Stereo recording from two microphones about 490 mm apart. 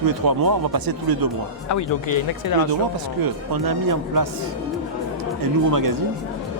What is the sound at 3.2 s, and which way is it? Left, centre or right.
Speech, right.